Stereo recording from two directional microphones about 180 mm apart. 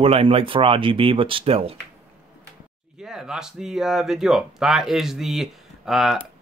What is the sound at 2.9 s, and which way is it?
Speech, 5° right (ahead or behind).